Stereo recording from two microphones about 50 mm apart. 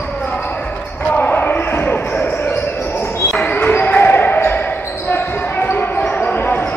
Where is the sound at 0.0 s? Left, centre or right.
Left.